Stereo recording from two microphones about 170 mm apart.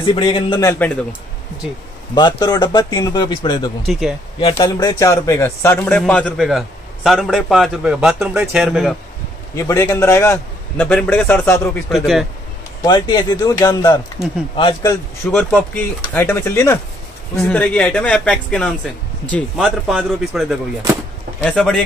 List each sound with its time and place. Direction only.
0.0 s speech: 30° left (ahead or behind)
0.7 s a man's voice: 10° left (ahead or behind)
2.1 s speech: 25° left (ahead or behind)
3.8 s a man's voice: centre (ahead or behind)
4.4 s speech: 30° left (ahead or behind)
4.7 s a man's voice: 20° left (ahead or behind); by 8.9 s centre (ahead or behind)
9.6 s a man's voice: 20° left (ahead or behind)
12.8 s speech: 25° left (ahead or behind)
15.3 s a man's voice: 10° left (ahead or behind)